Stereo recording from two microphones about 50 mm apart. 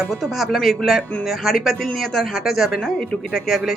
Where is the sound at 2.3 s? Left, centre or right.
Centre.